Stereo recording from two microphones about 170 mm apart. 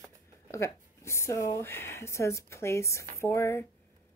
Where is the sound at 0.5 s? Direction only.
15° left (ahead or behind).